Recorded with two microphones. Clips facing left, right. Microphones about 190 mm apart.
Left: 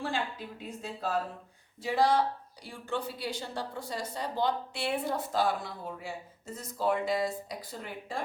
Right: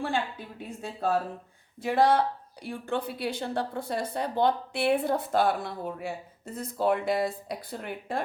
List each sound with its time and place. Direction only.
0.8 s a woman's voice: 50° right (ahead or behind)